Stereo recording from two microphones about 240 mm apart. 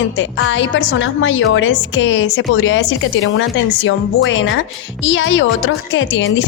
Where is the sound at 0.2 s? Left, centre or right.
Left.